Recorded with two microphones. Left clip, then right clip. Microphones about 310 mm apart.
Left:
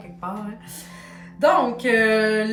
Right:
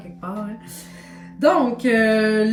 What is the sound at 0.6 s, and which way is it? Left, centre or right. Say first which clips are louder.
Music: even; centre.